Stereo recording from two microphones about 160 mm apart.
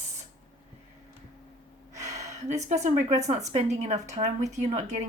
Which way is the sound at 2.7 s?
45° right (ahead or behind).